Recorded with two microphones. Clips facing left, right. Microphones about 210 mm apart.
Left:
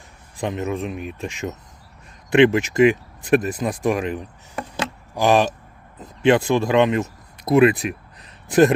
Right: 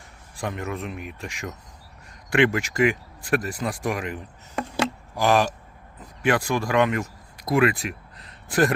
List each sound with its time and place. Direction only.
0.3 s speech: 20° left (ahead or behind)